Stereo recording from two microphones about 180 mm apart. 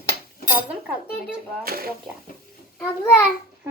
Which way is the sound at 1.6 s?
55° right (ahead or behind).